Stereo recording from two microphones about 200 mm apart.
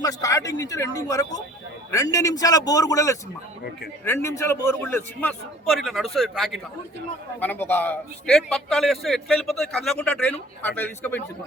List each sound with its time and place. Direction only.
0.0 s a man's voice: 15° left (ahead or behind)